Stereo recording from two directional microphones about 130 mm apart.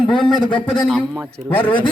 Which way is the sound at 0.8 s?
5° right (ahead or behind).